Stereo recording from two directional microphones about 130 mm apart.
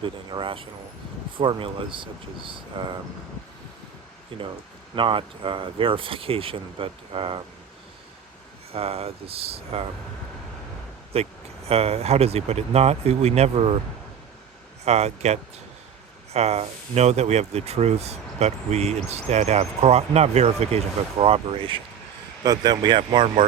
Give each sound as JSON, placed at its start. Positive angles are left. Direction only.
{"t": 0.0, "sound": "speech", "side_deg": -40}
{"t": 4.3, "sound": "speech", "side_deg": -45}
{"t": 8.7, "sound": "speech", "side_deg": -50}
{"t": 11.1, "sound": "speech", "side_deg": -50}
{"t": 14.8, "sound": "speech", "side_deg": -60}
{"t": 22.4, "sound": "speech", "side_deg": -30}